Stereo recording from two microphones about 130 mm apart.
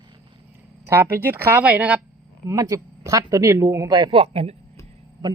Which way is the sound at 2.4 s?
25° right (ahead or behind).